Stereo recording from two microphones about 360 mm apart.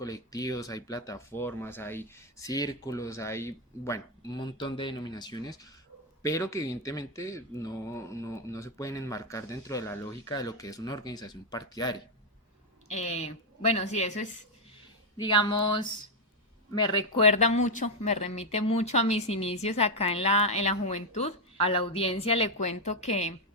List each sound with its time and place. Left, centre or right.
0.0 s a woman's voice: centre